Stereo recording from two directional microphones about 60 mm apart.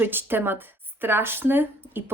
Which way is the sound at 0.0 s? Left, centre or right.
Right.